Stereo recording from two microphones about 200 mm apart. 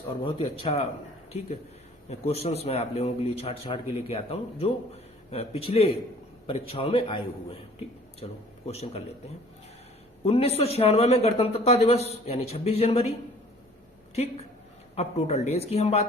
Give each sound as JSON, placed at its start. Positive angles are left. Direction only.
{"t": 0.6, "sound": "a man's voice", "side_deg": 30}
{"t": 2.0, "sound": "a man's voice", "side_deg": 30}
{"t": 10.2, "sound": "a man's voice", "side_deg": 30}
{"t": 14.9, "sound": "a man's voice", "side_deg": 30}